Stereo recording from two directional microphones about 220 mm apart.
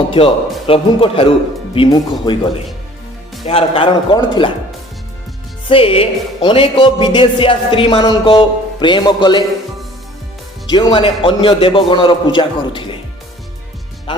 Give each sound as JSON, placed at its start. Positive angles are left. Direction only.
{"t": 0.1, "sound": "a man's voice", "side_deg": 25}
{"t": 1.7, "sound": "music", "side_deg": 20}
{"t": 5.6, "sound": "music", "side_deg": 25}
{"t": 10.7, "sound": "music", "side_deg": 20}